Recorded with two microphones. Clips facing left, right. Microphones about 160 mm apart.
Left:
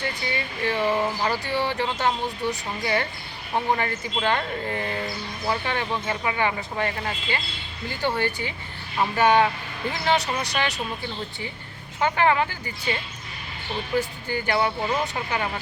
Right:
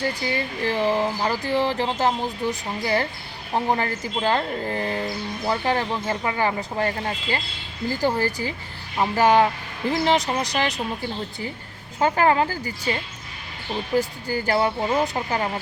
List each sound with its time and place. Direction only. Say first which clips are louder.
0.0 s speech: right 4 dB; 35° right (ahead or behind)
11.9 s speech: right 2 dB; 40° right (ahead or behind)
14.3 s speech: right 2 dB; 40° right (ahead or behind)